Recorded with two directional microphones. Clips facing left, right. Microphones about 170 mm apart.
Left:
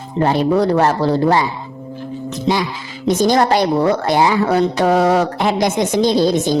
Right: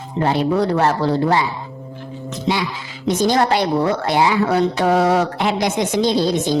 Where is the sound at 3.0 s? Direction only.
40° left (ahead or behind).